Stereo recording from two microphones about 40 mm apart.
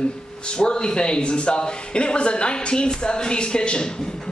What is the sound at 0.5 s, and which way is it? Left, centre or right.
A man's voice, left.